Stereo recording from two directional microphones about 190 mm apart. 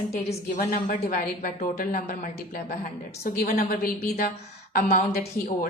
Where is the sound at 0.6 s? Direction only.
50° left (ahead or behind).